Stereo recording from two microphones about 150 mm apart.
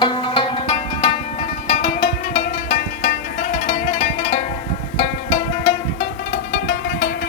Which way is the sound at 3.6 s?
70° left (ahead or behind).